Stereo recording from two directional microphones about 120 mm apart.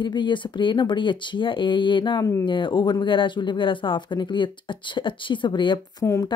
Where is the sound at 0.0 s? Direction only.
40° left (ahead or behind).